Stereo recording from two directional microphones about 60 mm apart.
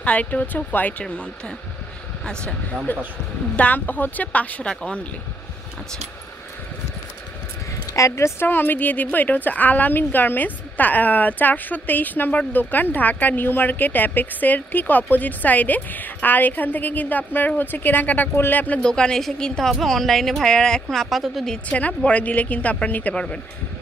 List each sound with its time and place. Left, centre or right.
0.0 s a woman's voice: left
2.2 s speech: centre
3.5 s a woman's voice: left
7.9 s speech: left
8.4 s a woman's voice: left
18.8 s speech: centre
21.6 s a woman's voice: left